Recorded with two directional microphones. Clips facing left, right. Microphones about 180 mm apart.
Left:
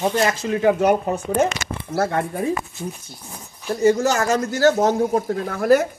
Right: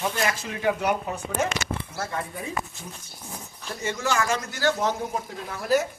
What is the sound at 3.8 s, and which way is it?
Speech, 40° left (ahead or behind).